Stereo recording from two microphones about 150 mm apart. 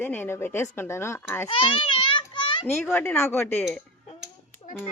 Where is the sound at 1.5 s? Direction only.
35° left (ahead or behind).